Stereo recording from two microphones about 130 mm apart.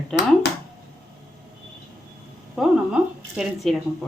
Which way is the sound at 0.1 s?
5° left (ahead or behind).